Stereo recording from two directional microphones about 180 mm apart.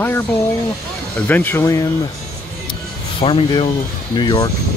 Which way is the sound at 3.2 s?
30° left (ahead or behind).